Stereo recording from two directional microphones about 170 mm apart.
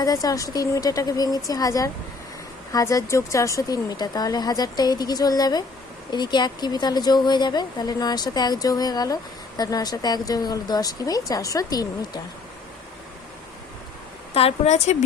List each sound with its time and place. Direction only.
0.0 s speech: 20° left (ahead or behind)
14.3 s a woman's voice: 40° left (ahead or behind)